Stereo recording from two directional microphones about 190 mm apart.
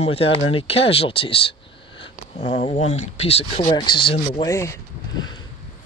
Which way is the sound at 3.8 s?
25° left (ahead or behind).